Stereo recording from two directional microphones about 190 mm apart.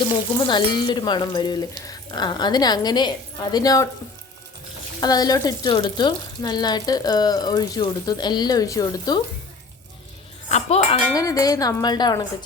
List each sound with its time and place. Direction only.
0.4 s speech: 25° left (ahead or behind)
4.9 s speech: 20° left (ahead or behind)
10.5 s speech: 35° left (ahead or behind)
11.1 s speech: 15° left (ahead or behind)